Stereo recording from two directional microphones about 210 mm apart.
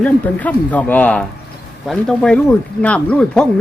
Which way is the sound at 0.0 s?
5° left (ahead or behind).